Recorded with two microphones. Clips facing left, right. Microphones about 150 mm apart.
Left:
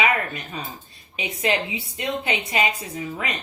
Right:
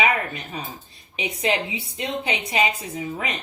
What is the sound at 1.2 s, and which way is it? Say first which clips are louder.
Speech: even; 25° right (ahead or behind).